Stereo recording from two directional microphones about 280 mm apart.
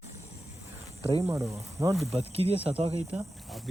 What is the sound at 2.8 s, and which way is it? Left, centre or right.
Speech, right.